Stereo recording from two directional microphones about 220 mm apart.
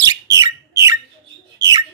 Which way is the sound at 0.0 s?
15° right (ahead or behind).